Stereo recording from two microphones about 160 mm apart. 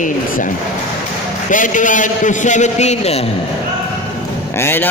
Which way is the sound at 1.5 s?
55° left (ahead or behind).